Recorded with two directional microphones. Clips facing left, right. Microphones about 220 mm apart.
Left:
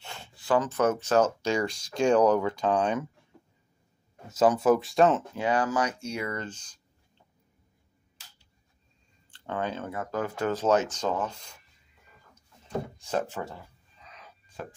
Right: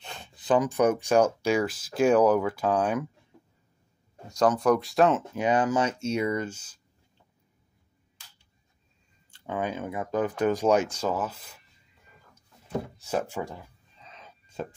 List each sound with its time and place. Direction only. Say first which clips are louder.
0.0 s speech: right 1 dB; 20° right (ahead or behind)
4.3 s speech: left 1 dB; 5° left (ahead or behind)
5.3 s speech: right 2 dB; 20° right (ahead or behind)
9.3 s speech: right 1 dB; 10° right (ahead or behind)
12.6 s speech: right 1 dB; 5° right (ahead or behind)
14.0 s whispering: right 1 dB; 25° right (ahead or behind)